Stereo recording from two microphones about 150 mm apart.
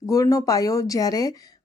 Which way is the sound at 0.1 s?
25° left (ahead or behind).